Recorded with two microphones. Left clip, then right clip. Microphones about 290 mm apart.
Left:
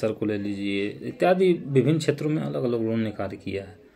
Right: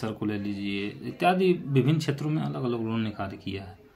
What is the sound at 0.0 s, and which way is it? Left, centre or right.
Speech, right.